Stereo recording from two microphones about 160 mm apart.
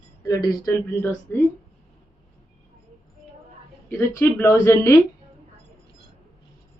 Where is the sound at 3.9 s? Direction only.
15° left (ahead or behind).